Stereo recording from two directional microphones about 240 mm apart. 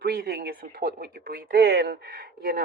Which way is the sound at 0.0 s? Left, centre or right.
Right.